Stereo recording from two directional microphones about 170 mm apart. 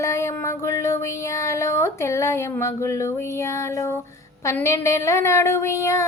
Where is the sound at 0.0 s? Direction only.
15° left (ahead or behind).